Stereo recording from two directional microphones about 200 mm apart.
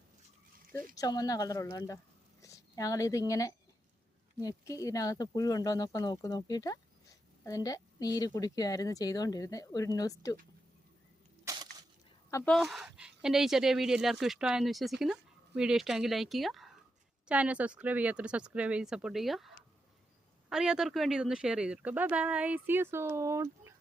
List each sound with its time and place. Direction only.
0.9 s a woman's voice: 20° left (ahead or behind)
11.4 s a sound: 20° right (ahead or behind)
12.5 s speech: centre (ahead or behind)